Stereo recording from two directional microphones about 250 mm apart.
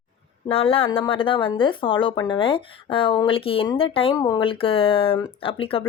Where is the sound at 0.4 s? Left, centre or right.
Left.